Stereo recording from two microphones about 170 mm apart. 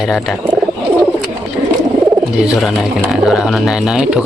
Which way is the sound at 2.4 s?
Centre (ahead or behind).